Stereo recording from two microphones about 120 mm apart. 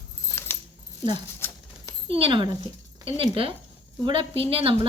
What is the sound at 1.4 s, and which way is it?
Patter, 20° left (ahead or behind).